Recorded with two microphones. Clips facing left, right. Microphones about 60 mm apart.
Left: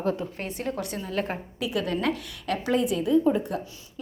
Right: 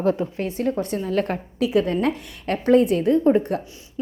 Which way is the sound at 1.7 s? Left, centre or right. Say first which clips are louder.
Right 5 dB; right.